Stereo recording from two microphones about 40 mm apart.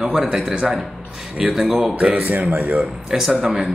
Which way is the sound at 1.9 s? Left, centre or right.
Right.